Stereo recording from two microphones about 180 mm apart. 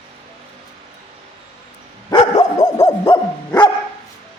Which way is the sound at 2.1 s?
20° left (ahead or behind).